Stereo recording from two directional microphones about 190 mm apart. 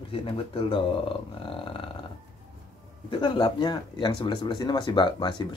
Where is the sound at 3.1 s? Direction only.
25° left (ahead or behind).